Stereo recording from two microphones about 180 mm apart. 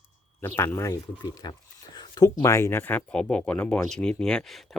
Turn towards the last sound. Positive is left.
turn(degrees=5)  # may be behind; listen again after turning